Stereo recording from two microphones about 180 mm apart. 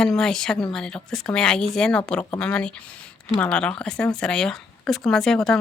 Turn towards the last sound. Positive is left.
turn(degrees=0)  # may be behind; listen again after turning